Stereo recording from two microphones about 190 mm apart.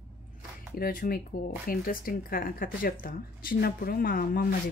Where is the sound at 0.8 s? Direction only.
50° left (ahead or behind).